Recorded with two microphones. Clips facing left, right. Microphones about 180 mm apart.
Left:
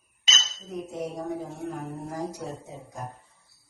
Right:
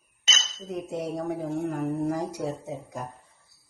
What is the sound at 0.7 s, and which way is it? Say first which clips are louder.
Speech: right 2 dB; 80° right.